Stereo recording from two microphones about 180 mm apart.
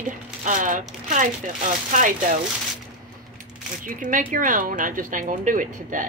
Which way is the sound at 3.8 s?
45° right (ahead or behind).